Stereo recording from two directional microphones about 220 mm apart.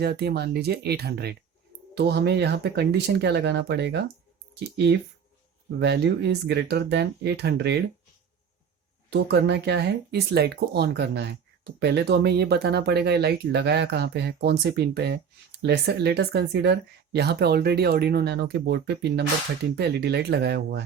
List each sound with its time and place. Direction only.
0.0 s speech: 50° right (ahead or behind)
5.8 s speech: 50° right (ahead or behind)
9.0 s speech: 50° right (ahead or behind)